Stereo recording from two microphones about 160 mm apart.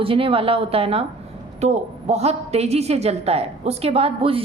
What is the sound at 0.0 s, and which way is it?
A woman's voice, 35° right (ahead or behind).